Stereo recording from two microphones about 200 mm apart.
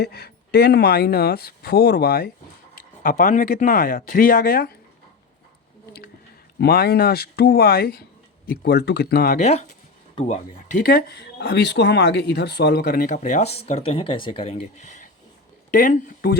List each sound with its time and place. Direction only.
0.0 s speech: 50° left (ahead or behind)
6.6 s speech: 50° left (ahead or behind)